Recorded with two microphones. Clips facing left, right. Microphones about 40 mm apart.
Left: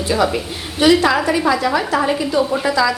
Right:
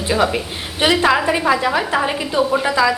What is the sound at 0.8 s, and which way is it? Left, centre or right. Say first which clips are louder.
A woman's voice: left 2 dB; right.